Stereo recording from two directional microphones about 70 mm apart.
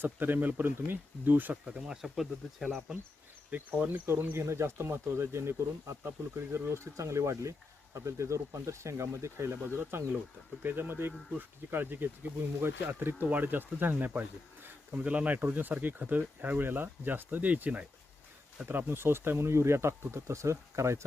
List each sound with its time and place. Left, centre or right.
0.0 s speech: right
1.6 s speech: centre
3.5 s speech: right